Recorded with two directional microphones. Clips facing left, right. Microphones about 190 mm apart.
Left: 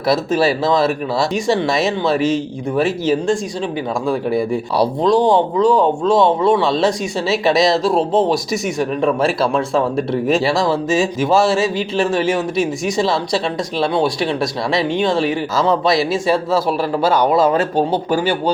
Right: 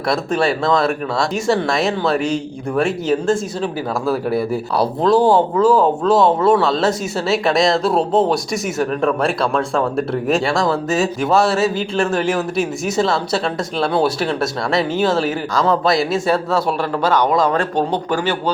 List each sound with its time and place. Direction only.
0.1 s speech: 5° left (ahead or behind)